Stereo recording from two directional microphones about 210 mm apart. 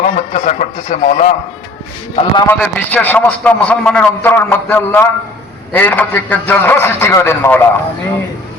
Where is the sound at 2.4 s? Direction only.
10° left (ahead or behind).